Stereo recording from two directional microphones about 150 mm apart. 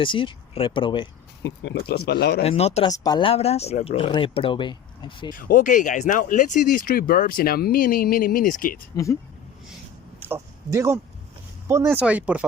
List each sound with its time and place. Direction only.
0.0 s speech: 35° left (ahead or behind)
2.0 s speech: 90° left
2.4 s speech: 45° left (ahead or behind)
2.8 s speech: 25° left (ahead or behind)
5.3 s speech: 65° left (ahead or behind)
10.2 s speech: 15° right (ahead or behind)